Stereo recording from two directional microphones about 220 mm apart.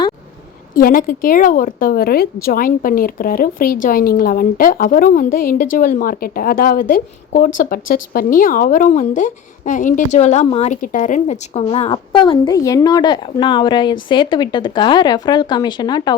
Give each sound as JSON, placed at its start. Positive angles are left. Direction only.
{"t": 0.7, "sound": "a woman's voice", "side_deg": 40}